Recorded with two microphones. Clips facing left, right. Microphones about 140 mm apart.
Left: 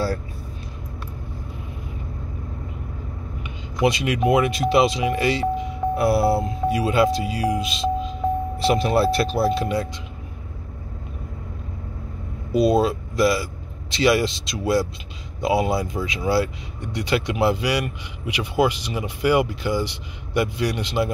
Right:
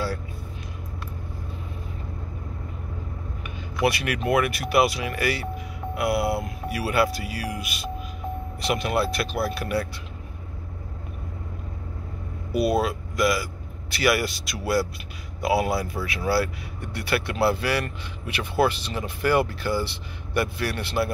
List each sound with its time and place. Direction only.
3.4 s speech: 20° left (ahead or behind)
12.5 s speech: 25° left (ahead or behind)